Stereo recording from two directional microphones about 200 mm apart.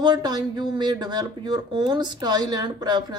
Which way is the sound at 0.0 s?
20° right (ahead or behind).